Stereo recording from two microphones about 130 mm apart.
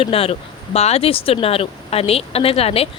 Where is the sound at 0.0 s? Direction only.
45° left (ahead or behind).